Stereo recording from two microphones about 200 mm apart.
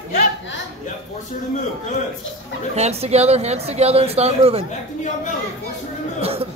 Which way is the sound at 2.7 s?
30° right (ahead or behind).